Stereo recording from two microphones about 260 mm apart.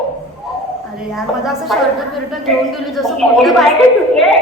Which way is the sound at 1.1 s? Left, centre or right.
Centre.